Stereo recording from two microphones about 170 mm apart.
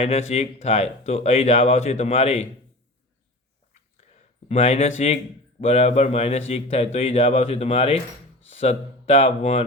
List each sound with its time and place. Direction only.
0.0 s a man's voice: 35° left (ahead or behind)
4.4 s a man's voice: 35° left (ahead or behind)